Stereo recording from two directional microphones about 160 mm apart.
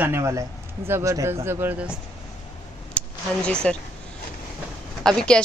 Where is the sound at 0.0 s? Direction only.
15° right (ahead or behind).